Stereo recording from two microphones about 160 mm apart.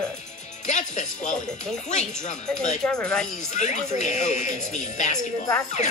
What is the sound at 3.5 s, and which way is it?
Speech, 50° left (ahead or behind).